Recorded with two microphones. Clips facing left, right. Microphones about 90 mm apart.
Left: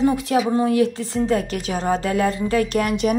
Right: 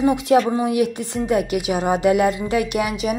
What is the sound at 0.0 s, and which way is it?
A woman's voice, 20° right (ahead or behind).